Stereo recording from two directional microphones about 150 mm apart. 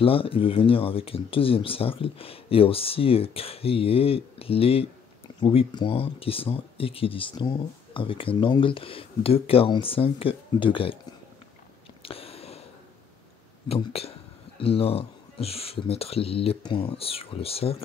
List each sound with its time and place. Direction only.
0.0 s speech: 40° left (ahead or behind)
12.0 s a sound: 40° left (ahead or behind)
13.7 s speech: 40° left (ahead or behind)